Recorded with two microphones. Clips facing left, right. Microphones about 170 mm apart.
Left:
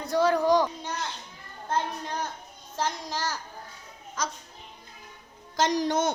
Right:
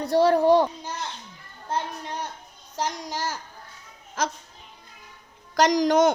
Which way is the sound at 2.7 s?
15° right (ahead or behind).